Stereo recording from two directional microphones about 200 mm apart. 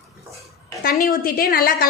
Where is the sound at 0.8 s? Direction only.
45° left (ahead or behind).